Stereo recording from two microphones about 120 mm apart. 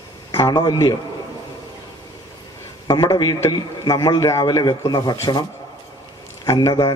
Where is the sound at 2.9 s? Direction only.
35° left (ahead or behind).